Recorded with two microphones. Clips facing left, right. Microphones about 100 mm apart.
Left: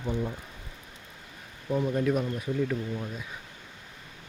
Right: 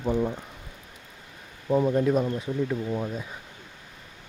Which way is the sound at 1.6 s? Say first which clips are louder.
Right 4 dB; 25° right (ahead or behind).